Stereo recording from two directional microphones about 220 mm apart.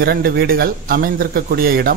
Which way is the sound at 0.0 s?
45° right (ahead or behind).